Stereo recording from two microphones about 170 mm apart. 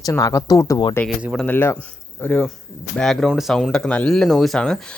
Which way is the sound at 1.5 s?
10° left (ahead or behind).